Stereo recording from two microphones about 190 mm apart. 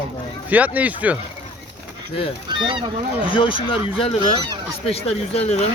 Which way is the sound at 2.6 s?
25° right (ahead or behind).